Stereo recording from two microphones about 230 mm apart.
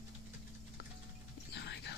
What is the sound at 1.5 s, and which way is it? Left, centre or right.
Whispering, left.